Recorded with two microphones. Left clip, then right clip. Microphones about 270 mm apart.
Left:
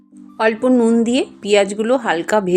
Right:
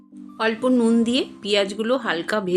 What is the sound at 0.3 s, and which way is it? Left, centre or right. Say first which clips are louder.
A woman's voice: left 6 dB; centre.